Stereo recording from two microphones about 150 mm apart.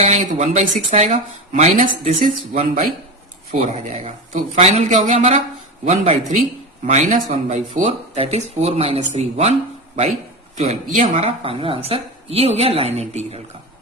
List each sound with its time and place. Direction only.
0.0 s speech: 45° right (ahead or behind)
11.2 s a woman's voice: 40° right (ahead or behind)